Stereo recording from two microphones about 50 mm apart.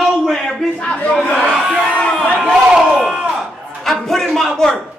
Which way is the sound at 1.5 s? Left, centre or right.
Centre.